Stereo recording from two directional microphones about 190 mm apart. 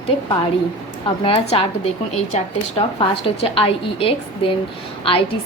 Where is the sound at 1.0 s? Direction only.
30° left (ahead or behind).